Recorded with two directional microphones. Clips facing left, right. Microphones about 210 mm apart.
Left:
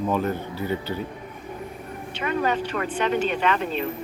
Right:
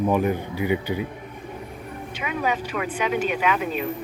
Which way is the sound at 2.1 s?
10° right (ahead or behind).